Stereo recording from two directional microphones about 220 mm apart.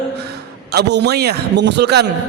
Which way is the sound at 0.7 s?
50° right (ahead or behind).